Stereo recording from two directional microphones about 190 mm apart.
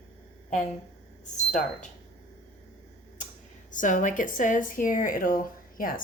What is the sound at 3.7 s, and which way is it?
A woman's voice, 40° left (ahead or behind).